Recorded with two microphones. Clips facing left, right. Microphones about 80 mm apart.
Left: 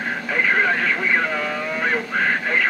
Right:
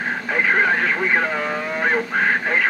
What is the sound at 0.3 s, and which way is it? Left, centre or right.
Speech, right.